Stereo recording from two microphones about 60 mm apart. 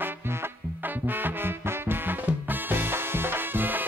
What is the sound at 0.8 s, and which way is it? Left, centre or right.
Music, right.